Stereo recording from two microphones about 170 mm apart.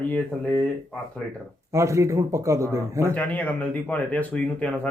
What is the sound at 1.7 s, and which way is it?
Speech, 15° right (ahead or behind).